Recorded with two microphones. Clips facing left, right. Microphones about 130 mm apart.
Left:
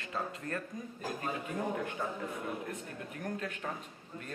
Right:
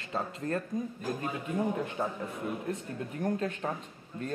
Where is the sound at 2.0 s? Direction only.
35° right (ahead or behind).